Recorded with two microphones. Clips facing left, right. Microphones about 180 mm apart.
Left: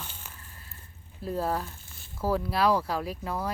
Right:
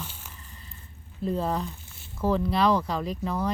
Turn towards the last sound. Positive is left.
turn(degrees=5)  # may be behind; listen again after turning